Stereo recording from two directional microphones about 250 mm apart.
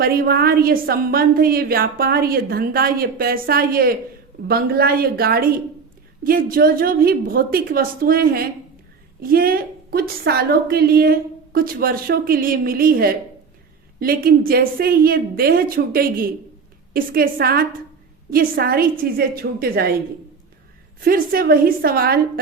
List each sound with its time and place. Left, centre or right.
0.0 s a woman's voice: right
21.0 s a woman's voice: right